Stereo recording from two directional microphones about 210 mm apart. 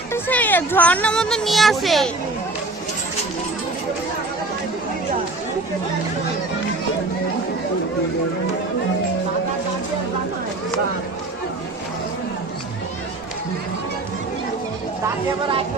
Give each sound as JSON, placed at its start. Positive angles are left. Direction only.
{"t": 0.1, "sound": "speech", "side_deg": 10}
{"t": 15.0, "sound": "speech", "side_deg": -25}